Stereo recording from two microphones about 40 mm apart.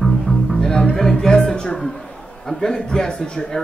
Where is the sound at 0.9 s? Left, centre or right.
Centre.